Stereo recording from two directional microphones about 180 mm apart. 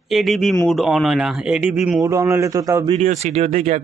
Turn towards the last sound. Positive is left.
turn(degrees=-40)  # may be behind; listen again after turning